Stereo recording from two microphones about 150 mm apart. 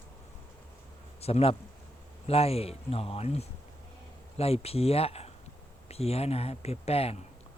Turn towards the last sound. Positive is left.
turn(degrees=40)  # may be behind; listen again after turning